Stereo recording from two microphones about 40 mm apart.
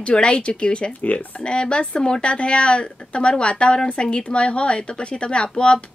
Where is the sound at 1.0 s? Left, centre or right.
Left.